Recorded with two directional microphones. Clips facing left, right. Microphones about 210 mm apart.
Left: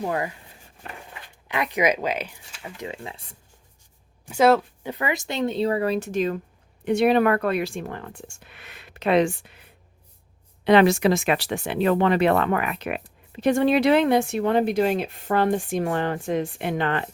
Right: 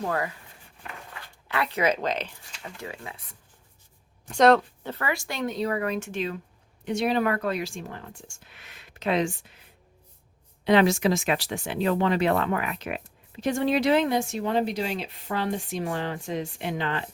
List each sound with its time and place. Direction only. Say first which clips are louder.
0.0 s speech: left 2 dB; 20° left (ahead or behind)
2.7 s speech: left 5 dB; 20° left (ahead or behind)
4.3 s speech: left 1 dB; 5° left (ahead or behind); by 6.4 s 45° left (ahead or behind)
6.8 s speech: left 6 dB; 60° left (ahead or behind)
10.6 s speech: left 4 dB; 65° left (ahead or behind)